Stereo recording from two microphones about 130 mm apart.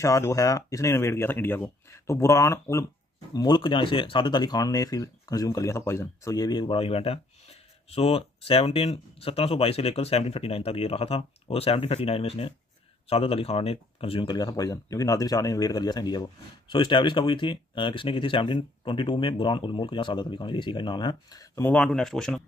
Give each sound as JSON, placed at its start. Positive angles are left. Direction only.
{"t": 0.0, "sound": "speech", "side_deg": 25}
{"t": 3.3, "sound": "speech", "side_deg": 35}
{"t": 14.3, "sound": "speech", "side_deg": 30}
{"t": 21.6, "sound": "speech", "side_deg": 5}